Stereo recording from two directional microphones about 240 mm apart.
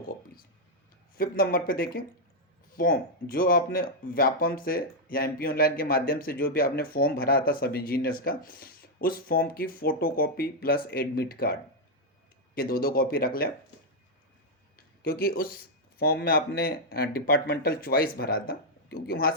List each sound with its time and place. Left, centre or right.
1.1 s speech: left
12.5 s speech: left
15.0 s speech: left